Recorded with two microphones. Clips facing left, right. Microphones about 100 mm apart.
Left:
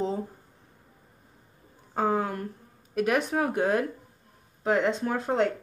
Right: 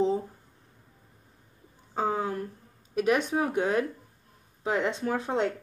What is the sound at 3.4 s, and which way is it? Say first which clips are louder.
Speech: left 1 dB; 5° left (ahead or behind).